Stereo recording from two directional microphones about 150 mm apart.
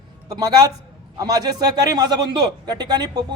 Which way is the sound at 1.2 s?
25° right (ahead or behind).